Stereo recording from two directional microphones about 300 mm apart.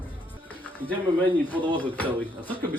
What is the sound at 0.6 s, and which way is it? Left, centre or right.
Speech, centre.